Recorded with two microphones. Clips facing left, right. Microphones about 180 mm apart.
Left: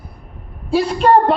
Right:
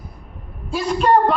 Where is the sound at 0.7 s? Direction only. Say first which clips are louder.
Left 4 dB; 30° left (ahead or behind).